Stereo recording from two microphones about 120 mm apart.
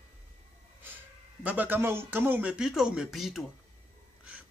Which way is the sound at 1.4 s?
15° right (ahead or behind).